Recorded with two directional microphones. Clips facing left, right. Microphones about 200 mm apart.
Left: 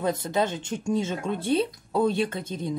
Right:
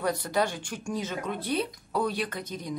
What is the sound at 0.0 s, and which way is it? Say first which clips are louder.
Speech: left 2 dB; 25° left (ahead or behind).